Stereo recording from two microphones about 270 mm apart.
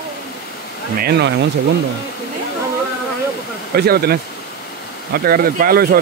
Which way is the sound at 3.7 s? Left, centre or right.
Right.